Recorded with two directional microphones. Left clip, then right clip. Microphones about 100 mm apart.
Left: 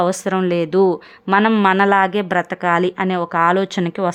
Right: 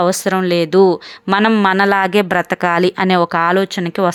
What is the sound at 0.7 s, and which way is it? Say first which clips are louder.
Speech: right 6 dB; 15° right (ahead or behind).